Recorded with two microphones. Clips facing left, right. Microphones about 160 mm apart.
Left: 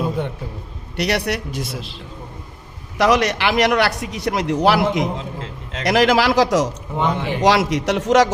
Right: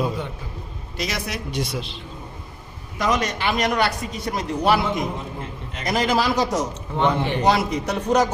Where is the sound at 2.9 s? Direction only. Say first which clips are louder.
Left 6 dB; 85° left.